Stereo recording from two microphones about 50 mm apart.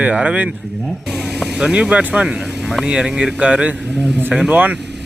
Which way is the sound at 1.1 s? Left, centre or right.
Centre.